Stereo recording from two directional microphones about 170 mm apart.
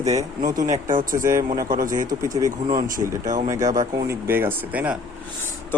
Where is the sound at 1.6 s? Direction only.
50° right (ahead or behind).